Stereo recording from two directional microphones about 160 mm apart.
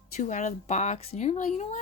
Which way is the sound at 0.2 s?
50° left (ahead or behind).